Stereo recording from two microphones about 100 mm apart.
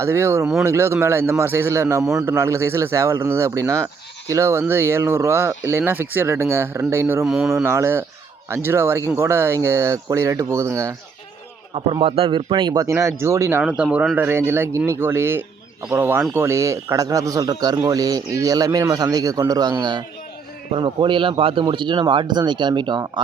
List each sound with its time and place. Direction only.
0.0 s speech: 25° right (ahead or behind)
7.3 s speech: 5° right (ahead or behind)
7.5 s speech: 25° right (ahead or behind)
12.0 s speech: 65° right (ahead or behind)
12.9 s speech: 25° right (ahead or behind)
13.6 s speech: 10° right (ahead or behind)
14.2 s a man's voice: 25° right (ahead or behind); by 20.1 s 45° right (ahead or behind)
20.7 s speech: 55° right (ahead or behind)